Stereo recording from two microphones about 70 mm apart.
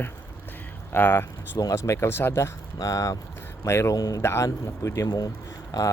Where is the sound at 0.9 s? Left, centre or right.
Left.